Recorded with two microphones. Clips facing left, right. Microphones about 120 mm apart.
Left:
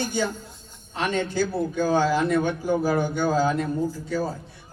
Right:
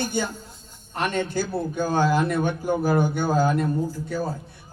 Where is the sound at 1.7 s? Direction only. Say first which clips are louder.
Right 1 dB; 55° right (ahead or behind).